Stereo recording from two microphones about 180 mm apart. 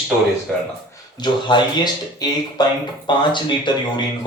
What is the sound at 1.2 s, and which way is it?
Speech, 25° left (ahead or behind).